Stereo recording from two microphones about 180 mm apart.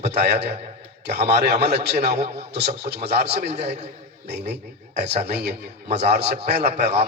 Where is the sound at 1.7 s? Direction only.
65° right (ahead or behind).